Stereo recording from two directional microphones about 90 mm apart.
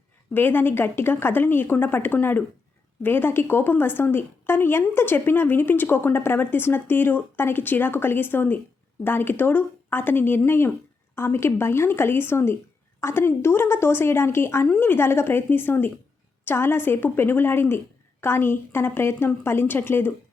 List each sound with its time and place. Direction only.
0.3 s a woman's voice: 20° left (ahead or behind)